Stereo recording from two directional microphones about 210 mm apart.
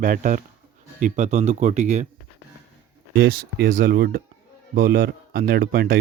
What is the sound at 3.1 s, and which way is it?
A man's voice, 45° right (ahead or behind).